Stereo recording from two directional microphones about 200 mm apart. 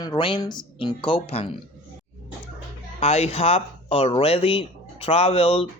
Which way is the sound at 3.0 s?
30° left (ahead or behind).